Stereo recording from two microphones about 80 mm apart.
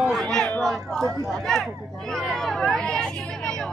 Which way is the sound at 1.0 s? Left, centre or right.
Right.